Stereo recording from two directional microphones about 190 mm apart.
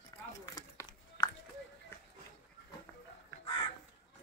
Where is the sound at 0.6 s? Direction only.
20° left (ahead or behind).